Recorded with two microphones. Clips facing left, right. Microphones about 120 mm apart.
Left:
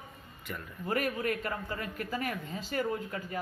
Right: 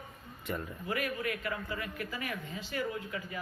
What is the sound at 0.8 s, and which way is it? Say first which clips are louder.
A man's voice: left 4 dB; 45° left (ahead or behind).